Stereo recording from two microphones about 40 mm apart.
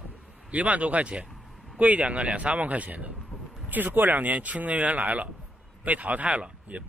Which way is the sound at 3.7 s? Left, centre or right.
Right.